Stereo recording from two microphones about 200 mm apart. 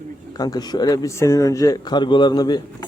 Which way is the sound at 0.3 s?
20° left (ahead or behind).